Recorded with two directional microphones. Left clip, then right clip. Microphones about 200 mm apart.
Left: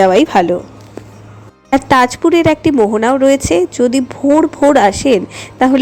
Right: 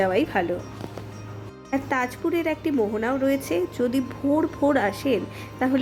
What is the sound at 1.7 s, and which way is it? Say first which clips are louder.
Speech: left 15 dB; 40° left (ahead or behind).